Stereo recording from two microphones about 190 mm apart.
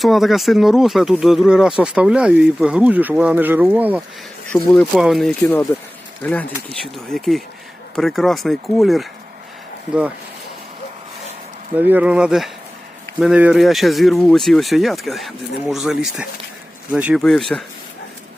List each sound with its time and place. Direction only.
0.0 s speech: centre (ahead or behind)
4.5 s speech: 5° left (ahead or behind)
11.8 s speech: 10° right (ahead or behind)
17.5 s speech: 5° left (ahead or behind)